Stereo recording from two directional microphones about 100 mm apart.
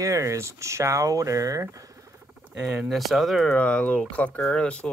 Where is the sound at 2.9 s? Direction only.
Centre (ahead or behind).